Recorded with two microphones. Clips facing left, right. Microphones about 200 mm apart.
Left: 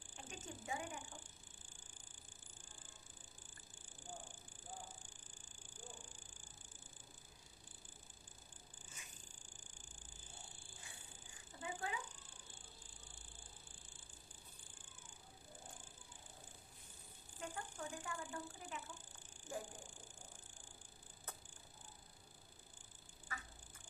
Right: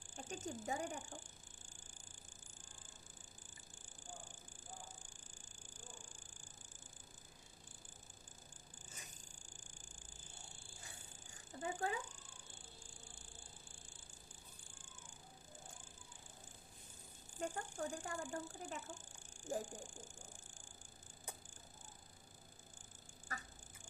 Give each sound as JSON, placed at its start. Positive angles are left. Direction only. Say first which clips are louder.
{"t": 0.2, "sound": "ratchet", "louder": "right 6 dB", "side_deg": -45}
{"t": 11.6, "sound": "a sound", "louder": "right 5 dB", "side_deg": -45}
{"t": 17.4, "sound": "a woman's voice", "louder": "right 5 dB", "side_deg": -45}
{"t": 23.3, "sound": "duck", "louder": "right 2 dB", "side_deg": -40}